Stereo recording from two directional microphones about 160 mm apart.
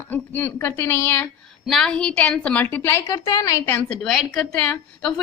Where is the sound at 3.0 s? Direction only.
25° left (ahead or behind).